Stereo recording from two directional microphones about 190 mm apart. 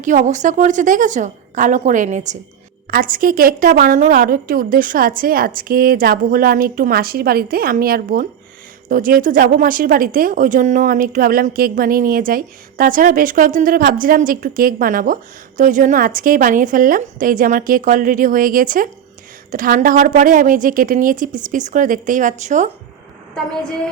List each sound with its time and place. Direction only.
0.0 s a woman's voice: 40° right (ahead or behind)